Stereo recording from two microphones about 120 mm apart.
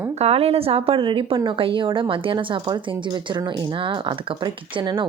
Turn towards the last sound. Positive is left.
turn(degrees=-45)  # may be behind; listen again after turning